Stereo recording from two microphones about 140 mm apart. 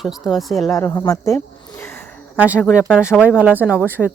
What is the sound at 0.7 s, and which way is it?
Speech, 20° left (ahead or behind).